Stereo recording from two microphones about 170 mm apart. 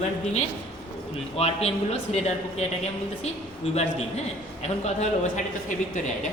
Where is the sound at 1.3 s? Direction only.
35° left (ahead or behind).